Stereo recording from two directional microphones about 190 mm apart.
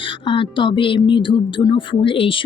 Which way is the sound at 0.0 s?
25° left (ahead or behind).